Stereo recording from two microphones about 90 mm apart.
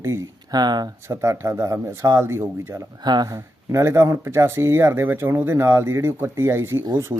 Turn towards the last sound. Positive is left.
turn(degrees=-35)  # may be behind; listen again after turning